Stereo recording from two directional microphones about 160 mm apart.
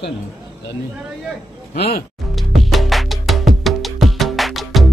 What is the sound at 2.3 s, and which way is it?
Music, centre (ahead or behind).